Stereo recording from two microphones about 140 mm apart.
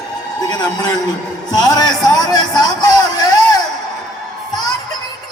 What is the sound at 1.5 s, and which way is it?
Speech, 30° left (ahead or behind).